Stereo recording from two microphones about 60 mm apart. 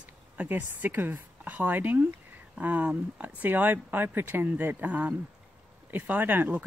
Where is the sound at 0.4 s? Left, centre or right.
Right.